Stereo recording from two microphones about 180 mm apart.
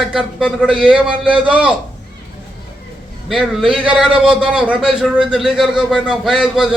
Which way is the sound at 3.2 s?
Centre (ahead or behind).